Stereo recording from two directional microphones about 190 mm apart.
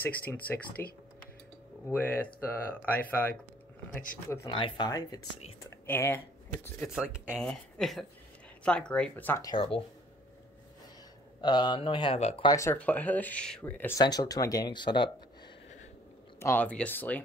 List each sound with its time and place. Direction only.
0.8 s speech: 15° left (ahead or behind)
7.0 s speech: 5° right (ahead or behind); by 9.5 s 10° left (ahead or behind)
9.5 s speech: 30° left (ahead or behind)
11.4 s speech: 25° left (ahead or behind)
12.4 s speech: 15° left (ahead or behind)
16.3 s speech: 10° left (ahead or behind)